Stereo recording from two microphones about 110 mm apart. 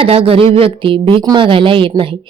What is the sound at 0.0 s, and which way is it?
Speech, 60° right (ahead or behind).